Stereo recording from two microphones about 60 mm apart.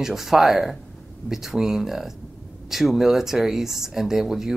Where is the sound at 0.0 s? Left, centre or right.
Centre.